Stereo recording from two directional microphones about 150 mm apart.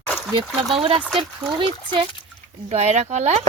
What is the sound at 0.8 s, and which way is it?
Speech, 35° right (ahead or behind).